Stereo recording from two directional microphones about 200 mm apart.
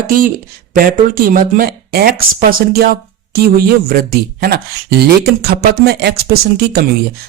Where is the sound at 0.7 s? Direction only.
45° right (ahead or behind).